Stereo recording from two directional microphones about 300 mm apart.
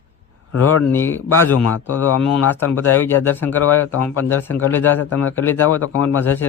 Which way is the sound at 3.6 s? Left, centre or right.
Left.